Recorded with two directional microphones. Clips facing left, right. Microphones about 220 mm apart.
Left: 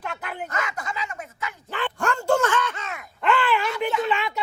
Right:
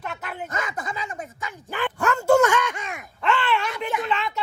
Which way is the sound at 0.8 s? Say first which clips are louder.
Right 1 dB; 15° right (ahead or behind).